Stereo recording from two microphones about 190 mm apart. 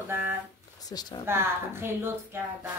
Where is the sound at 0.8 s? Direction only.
20° left (ahead or behind).